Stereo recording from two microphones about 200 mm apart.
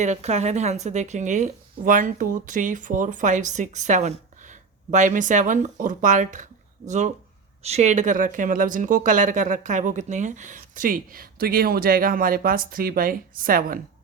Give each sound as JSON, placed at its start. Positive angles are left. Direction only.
{"t": 0.0, "sound": "speech", "side_deg": -35}